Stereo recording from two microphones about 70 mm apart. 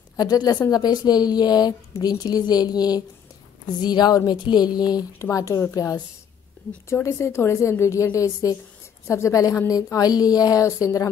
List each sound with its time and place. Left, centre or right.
0.2 s a woman's voice: left
3.8 s a woman's voice: left
5.2 s a woman's voice: left
6.9 s a woman's voice: left